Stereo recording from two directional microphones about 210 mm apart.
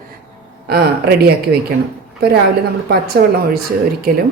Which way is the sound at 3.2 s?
45° right (ahead or behind).